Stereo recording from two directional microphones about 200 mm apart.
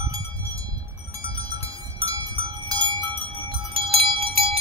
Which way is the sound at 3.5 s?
25° right (ahead or behind).